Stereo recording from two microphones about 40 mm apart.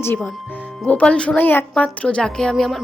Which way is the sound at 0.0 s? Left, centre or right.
Left.